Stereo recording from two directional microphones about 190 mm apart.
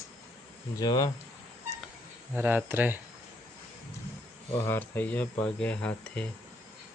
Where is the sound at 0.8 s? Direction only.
20° left (ahead or behind).